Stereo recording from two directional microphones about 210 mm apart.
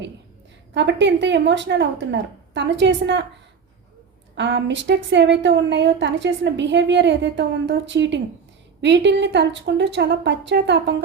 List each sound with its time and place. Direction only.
0.7 s a woman's voice: 55° right (ahead or behind)
4.4 s a woman's voice: 55° right (ahead or behind)